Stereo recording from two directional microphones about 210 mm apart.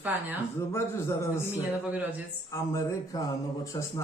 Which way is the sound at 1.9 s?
5° right (ahead or behind).